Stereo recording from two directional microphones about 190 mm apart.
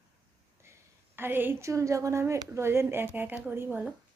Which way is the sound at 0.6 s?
15° right (ahead or behind).